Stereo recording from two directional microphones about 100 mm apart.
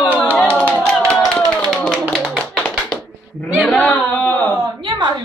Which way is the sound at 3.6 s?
10° left (ahead or behind).